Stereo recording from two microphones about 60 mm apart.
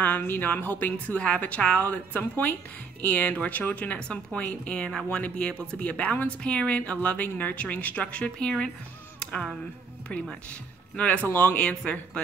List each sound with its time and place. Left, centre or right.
0.0 s a woman's voice: left; by 8.6 s centre
9.2 s music: centre
11.0 s a woman's voice: centre
11.2 s speech: left